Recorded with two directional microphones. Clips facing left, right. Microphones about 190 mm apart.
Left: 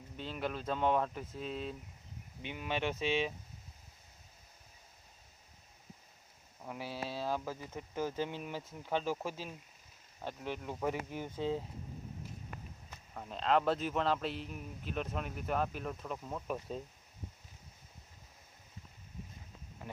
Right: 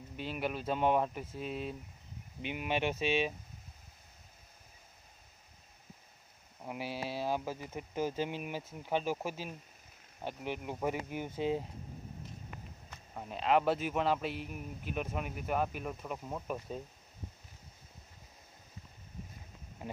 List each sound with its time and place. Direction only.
0.2 s speech: 10° right (ahead or behind)
6.6 s speech: 10° right (ahead or behind)
13.1 s speech: 10° right (ahead or behind)
16.5 s speech: centre (ahead or behind)